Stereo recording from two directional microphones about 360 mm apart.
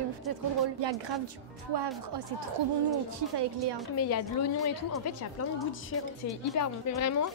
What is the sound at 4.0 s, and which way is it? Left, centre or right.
A woman's voice, left.